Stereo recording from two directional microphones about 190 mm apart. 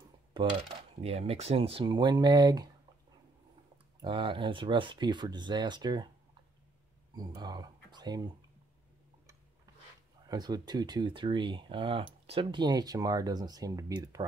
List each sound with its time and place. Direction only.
1.0 s speech: 35° right (ahead or behind)
3.7 s speech: 25° right (ahead or behind)
7.2 s speech: 20° right (ahead or behind)
10.2 s speech: 20° right (ahead or behind)